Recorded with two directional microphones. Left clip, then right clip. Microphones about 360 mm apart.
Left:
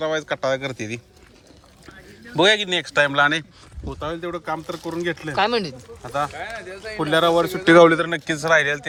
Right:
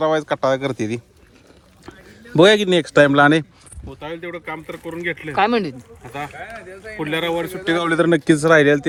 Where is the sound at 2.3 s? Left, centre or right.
Centre.